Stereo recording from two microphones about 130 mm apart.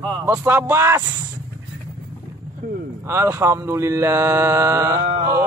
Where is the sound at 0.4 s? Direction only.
20° right (ahead or behind).